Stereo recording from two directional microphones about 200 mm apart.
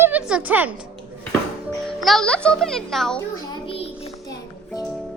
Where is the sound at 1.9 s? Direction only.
Centre (ahead or behind).